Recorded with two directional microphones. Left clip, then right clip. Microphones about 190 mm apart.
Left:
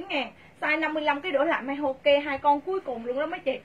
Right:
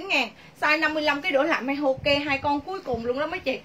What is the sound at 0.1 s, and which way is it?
A woman's voice, 30° right (ahead or behind).